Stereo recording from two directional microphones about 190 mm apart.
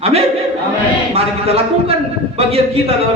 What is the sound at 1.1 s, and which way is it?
A man's voice, 30° right (ahead or behind).